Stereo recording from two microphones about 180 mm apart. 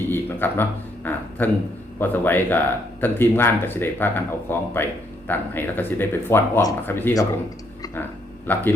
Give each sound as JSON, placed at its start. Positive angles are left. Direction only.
{"t": 0.1, "sound": "a sound", "side_deg": 10}
{"t": 2.0, "sound": "speech", "side_deg": 10}
{"t": 8.5, "sound": "speech", "side_deg": 10}